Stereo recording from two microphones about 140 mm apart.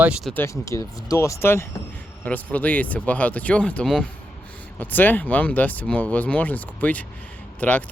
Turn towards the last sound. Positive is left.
turn(degrees=10)  # may be behind; listen again after turning